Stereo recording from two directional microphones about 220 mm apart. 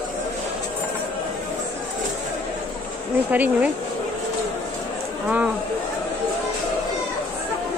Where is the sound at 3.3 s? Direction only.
5° right (ahead or behind).